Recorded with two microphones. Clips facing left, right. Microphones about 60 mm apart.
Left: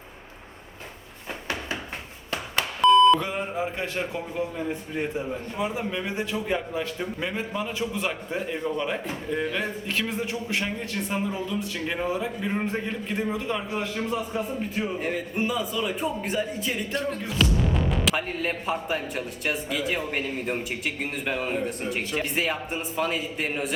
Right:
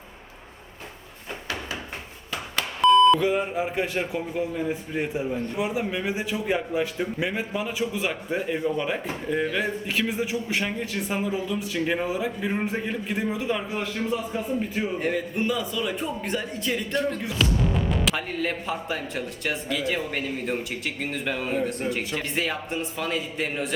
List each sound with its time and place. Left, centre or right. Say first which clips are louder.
2.8 s beep: even; centre
3.6 s a man's voice: right 2 dB; centre
17.0 s music: right 1 dB; centre
18.2 s a man's voice: even; centre